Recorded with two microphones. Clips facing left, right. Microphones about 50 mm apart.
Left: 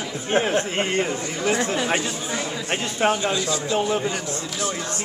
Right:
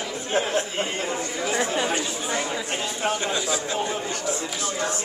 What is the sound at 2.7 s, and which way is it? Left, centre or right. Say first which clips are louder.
Speech: left 4 dB; left.